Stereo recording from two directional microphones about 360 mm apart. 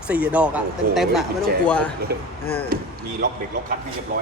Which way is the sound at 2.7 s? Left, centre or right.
Right.